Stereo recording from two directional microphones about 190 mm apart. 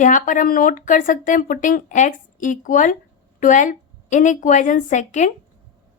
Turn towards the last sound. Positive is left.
turn(degrees=40)  # may be behind; listen again after turning